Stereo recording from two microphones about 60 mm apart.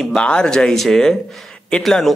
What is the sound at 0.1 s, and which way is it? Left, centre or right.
Speech, centre.